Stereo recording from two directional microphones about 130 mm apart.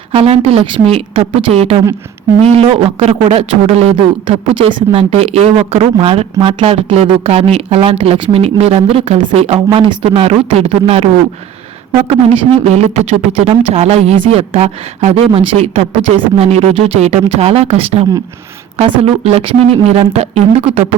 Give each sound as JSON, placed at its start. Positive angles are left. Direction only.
{"t": 0.1, "sound": "speech", "side_deg": -50}